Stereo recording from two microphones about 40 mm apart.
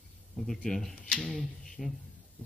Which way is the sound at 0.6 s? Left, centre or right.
Centre.